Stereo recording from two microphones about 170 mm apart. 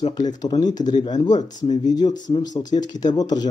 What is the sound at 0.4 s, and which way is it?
Speech, 25° left (ahead or behind).